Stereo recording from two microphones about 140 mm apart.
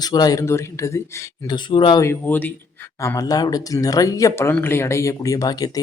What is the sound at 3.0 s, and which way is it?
Speech, 25° left (ahead or behind).